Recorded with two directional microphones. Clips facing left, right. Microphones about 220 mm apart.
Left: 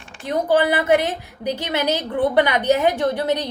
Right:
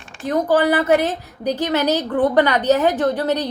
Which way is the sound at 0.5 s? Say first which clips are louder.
Right 1 dB; 10° left (ahead or behind).